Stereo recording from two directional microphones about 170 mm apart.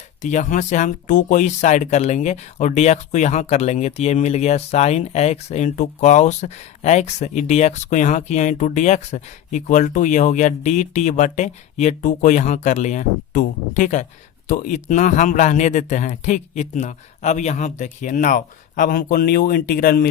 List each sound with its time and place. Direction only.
0.2 s speech: 45° left (ahead or behind)